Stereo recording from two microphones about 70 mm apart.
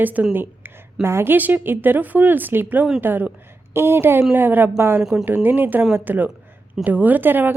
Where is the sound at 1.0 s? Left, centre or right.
Right.